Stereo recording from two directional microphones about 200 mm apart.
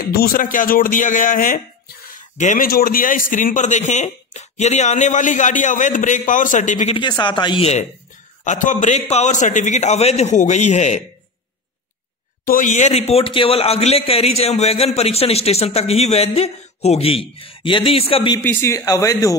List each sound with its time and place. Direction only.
0.1 s a man's voice: 50° left (ahead or behind)
7.0 s a man's voice: 20° left (ahead or behind)
12.4 s a man's voice: 40° left (ahead or behind)
18.4 s speech: 10° left (ahead or behind)